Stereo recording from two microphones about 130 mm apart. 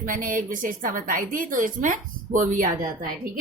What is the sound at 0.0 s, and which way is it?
A woman's voice, 90° right.